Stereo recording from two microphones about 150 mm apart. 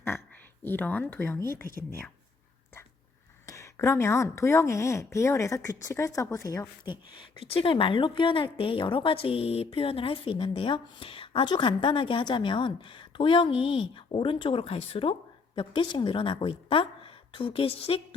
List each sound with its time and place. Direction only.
0.6 s speech: 15° left (ahead or behind)
3.4 s speech: 20° left (ahead or behind); by 18.0 s 40° left (ahead or behind)